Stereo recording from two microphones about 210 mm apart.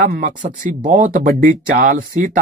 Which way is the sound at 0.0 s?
40° right (ahead or behind).